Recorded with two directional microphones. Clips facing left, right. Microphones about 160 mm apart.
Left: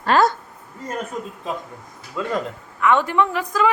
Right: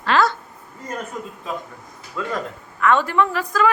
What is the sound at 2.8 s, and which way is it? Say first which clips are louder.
Speech: even; 15° left (ahead or behind).